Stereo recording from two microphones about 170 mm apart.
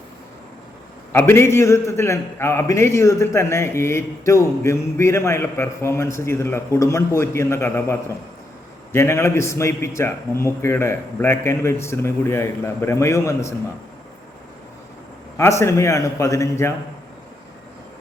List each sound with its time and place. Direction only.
1.1 s a man's voice: 15° left (ahead or behind)
15.4 s a man's voice: 15° left (ahead or behind)